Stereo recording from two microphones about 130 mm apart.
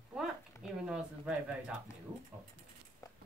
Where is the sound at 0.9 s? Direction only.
5° right (ahead or behind).